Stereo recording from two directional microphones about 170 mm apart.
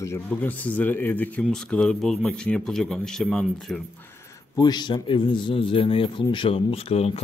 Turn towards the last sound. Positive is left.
turn(degrees=35)  # may be behind; listen again after turning